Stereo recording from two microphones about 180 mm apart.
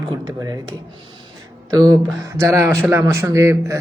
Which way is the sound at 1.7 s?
20° right (ahead or behind).